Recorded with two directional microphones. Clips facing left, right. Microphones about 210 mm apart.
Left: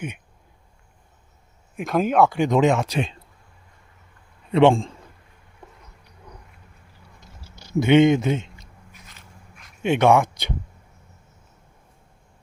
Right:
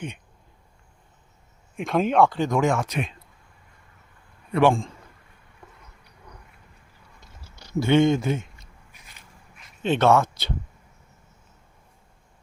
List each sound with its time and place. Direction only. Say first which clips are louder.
1.7 s speech: left 1 dB; centre (ahead or behind); by 3.2 s 30° left (ahead or behind)
4.5 s speech: left 4 dB; 25° left (ahead or behind)
7.5 s a sound: left 5 dB; 5° left (ahead or behind)
7.8 s speech: left 4 dB; 20° left (ahead or behind)
9.8 s speech: left 2 dB; 15° left (ahead or behind)